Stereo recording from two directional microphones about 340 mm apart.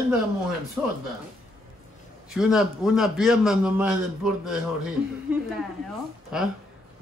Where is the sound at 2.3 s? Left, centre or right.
Centre.